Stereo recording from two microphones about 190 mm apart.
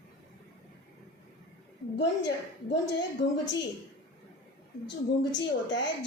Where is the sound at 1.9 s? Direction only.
65° left (ahead or behind).